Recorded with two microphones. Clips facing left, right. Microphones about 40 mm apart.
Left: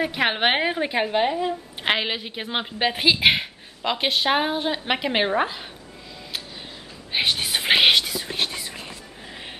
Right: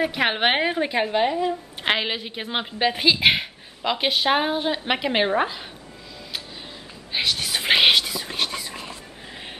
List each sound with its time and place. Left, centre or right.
0.0 s a woman's voice: centre
7.1 s a sound: left
7.6 s whispering: centre